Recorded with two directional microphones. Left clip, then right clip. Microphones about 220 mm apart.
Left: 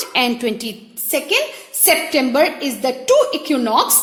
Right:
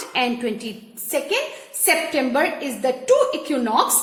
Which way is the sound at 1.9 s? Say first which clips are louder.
Left 4 dB; 35° left (ahead or behind).